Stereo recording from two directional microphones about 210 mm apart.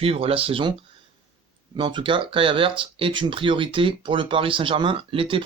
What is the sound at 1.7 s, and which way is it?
Speech, 20° right (ahead or behind).